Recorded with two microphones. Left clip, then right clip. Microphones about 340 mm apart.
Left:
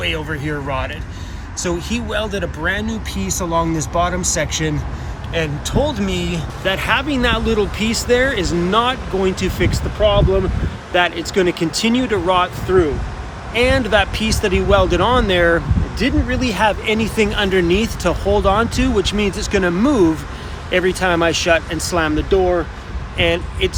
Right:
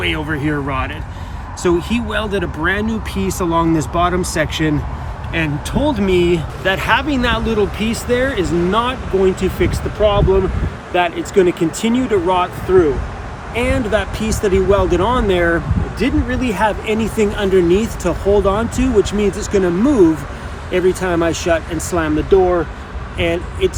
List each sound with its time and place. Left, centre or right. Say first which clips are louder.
0.0 s speech: right 3 dB; centre
6.6 s speech: even; centre